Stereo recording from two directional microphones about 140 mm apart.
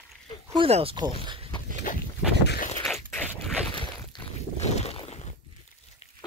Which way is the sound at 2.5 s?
55° left (ahead or behind).